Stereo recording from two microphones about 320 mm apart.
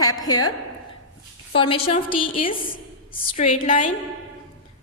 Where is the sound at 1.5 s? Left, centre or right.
Centre.